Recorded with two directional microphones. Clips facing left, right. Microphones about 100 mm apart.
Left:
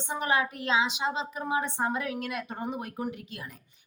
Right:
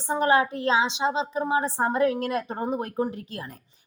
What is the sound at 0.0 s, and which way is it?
A woman's voice, 35° right (ahead or behind).